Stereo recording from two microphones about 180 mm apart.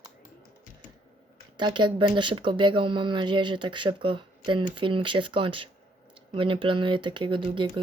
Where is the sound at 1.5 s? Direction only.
25° right (ahead or behind).